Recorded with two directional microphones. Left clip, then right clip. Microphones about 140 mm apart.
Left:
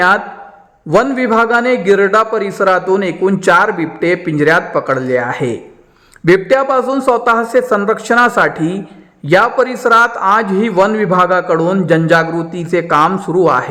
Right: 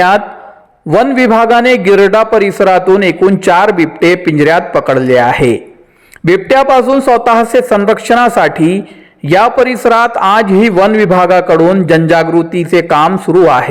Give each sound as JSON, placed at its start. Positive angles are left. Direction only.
{"t": 0.9, "sound": "a man's voice", "side_deg": -30}
{"t": 6.6, "sound": "a man's voice", "side_deg": -25}